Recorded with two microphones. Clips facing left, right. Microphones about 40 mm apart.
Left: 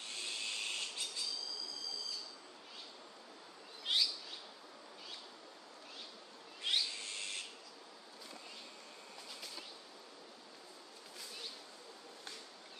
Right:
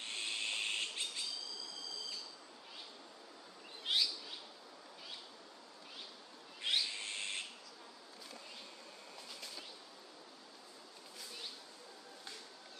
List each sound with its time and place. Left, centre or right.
0.0 s bird: right
3.8 s bird: centre
6.6 s owl: centre
6.9 s owl: right